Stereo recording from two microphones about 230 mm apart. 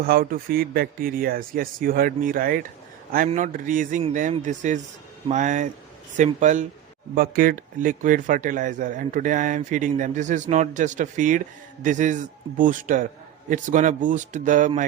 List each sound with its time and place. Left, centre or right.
0.0 s speech: right